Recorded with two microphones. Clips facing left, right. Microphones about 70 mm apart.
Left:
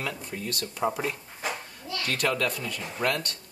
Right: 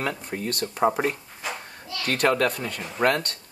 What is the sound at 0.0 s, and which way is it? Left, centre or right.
Speech, right.